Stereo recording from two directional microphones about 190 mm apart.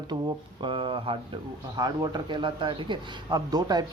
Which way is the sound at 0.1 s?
25° right (ahead or behind).